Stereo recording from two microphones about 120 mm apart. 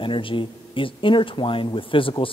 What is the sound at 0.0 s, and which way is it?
A man's voice, 45° left (ahead or behind).